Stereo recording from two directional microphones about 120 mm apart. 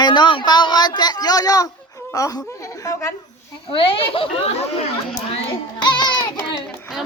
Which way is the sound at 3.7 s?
50° left (ahead or behind).